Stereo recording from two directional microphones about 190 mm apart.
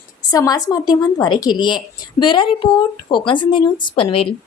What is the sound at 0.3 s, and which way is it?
A woman's voice, 20° left (ahead or behind).